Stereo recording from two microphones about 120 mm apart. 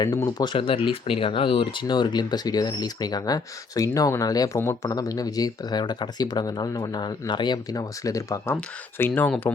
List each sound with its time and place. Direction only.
0.3 s speech: 35° left (ahead or behind)
9.0 s speech: 15° left (ahead or behind)